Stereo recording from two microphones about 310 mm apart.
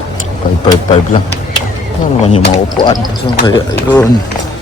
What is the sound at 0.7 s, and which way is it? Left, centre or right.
Speech, centre.